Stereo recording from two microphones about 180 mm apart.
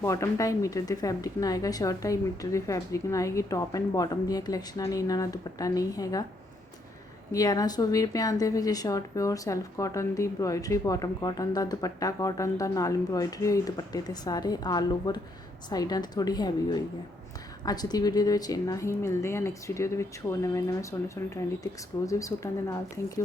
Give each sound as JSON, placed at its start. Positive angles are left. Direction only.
{"t": 0.0, "sound": "speech", "side_deg": 15}
{"t": 7.3, "sound": "a woman's voice", "side_deg": 20}